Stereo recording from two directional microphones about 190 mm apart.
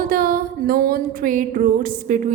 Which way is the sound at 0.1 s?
50° right (ahead or behind).